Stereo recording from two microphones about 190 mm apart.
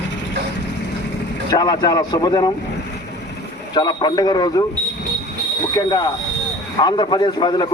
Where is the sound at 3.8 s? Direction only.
25° left (ahead or behind).